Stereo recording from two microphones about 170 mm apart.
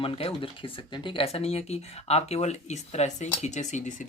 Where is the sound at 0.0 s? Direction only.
35° left (ahead or behind).